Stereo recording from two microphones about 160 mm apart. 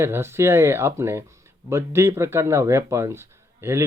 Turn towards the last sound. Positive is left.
turn(degrees=-15)  # may be behind; listen again after turning